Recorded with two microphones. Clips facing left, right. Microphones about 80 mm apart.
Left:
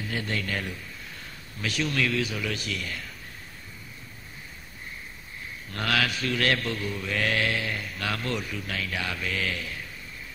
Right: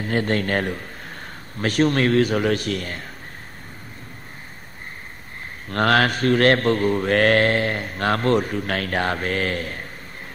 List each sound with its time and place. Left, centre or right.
0.0 s mantra: right
5.7 s mantra: right